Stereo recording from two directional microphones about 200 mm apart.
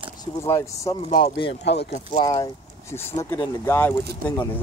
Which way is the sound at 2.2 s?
15° left (ahead or behind).